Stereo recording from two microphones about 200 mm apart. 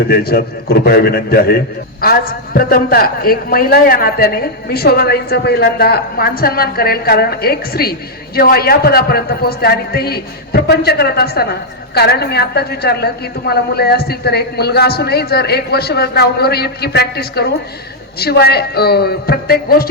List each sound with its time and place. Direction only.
0.1 s a woman's voice: 50° left (ahead or behind)